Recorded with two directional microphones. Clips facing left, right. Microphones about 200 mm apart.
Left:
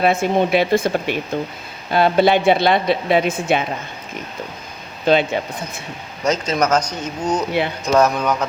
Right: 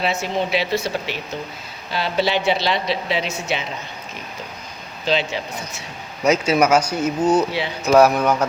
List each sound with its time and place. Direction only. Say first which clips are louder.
0.0 s speech: left 6 dB; 55° left (ahead or behind)
5.0 s speech: left 6 dB; 55° left (ahead or behind)
6.2 s speech: right 2 dB; 10° right (ahead or behind)